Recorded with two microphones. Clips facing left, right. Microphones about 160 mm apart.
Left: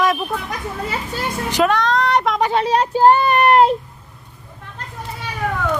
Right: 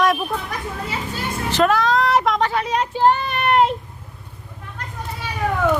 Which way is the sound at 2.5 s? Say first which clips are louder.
Left 4 dB; 30° left (ahead or behind).